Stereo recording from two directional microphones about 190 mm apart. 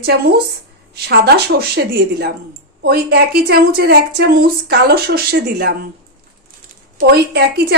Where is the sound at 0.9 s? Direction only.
60° right (ahead or behind).